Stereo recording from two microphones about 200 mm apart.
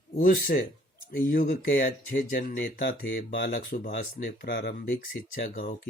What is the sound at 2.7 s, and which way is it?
Speech, 55° left (ahead or behind).